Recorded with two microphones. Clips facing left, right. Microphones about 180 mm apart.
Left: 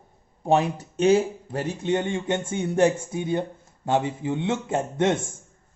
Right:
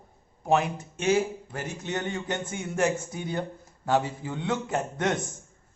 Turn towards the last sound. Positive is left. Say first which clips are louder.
# left 5 dB
turn(degrees=25)  # may be behind; listen again after turning